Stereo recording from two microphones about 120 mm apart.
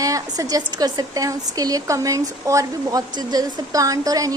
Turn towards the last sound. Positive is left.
turn(degrees=-30)  # may be behind; listen again after turning